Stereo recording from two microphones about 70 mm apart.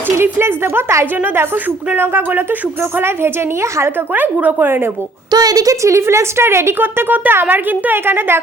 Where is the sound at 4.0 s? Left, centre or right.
Right.